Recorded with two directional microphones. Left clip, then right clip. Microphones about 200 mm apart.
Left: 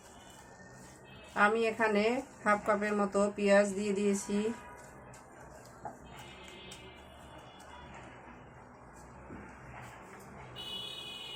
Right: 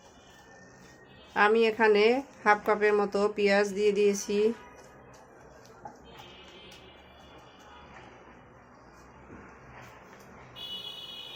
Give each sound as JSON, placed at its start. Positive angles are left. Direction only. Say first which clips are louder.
{"t": 1.3, "sound": "a woman's voice", "louder": "right 5 dB", "side_deg": -45}